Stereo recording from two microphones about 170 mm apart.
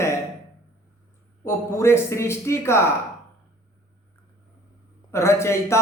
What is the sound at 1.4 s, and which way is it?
A man's voice, 15° left (ahead or behind).